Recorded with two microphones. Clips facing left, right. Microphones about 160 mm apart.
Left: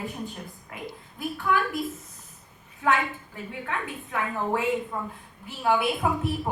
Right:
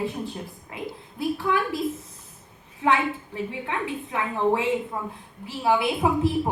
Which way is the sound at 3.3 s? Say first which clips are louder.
Right 4 dB; 25° right (ahead or behind).